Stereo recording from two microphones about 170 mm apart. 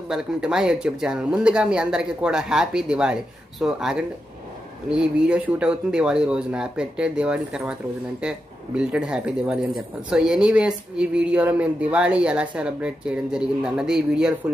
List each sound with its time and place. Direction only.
0.1 s speech: 5° right (ahead or behind)